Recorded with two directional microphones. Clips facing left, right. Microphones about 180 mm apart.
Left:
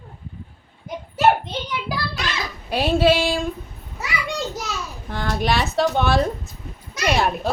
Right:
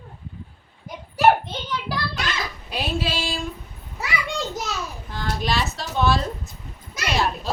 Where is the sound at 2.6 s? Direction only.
60° left (ahead or behind).